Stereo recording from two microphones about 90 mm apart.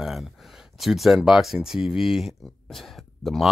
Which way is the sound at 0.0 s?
Centre (ahead or behind).